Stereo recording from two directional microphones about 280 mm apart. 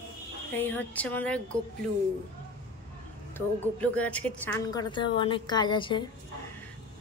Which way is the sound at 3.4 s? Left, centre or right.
Centre.